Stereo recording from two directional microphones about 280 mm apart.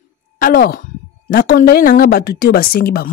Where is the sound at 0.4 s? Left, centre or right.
Left.